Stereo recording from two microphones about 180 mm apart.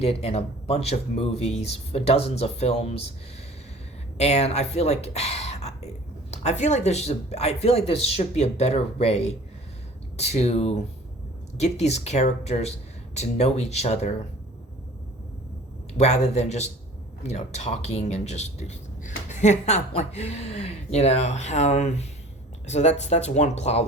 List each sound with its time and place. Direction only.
0.0 s speech: 35° left (ahead or behind)
4.2 s speech: 35° left (ahead or behind)
16.0 s speech: 40° left (ahead or behind)